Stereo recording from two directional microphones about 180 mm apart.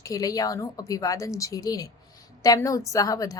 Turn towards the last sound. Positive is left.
turn(degrees=20)  # may be behind; listen again after turning